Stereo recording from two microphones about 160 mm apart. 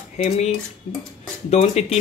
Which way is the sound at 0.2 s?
40° left (ahead or behind).